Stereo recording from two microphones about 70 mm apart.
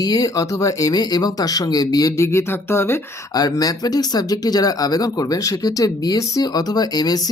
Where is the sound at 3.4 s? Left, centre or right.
Left.